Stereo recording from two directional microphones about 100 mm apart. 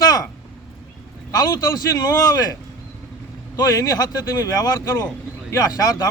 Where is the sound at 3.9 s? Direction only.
40° left (ahead or behind).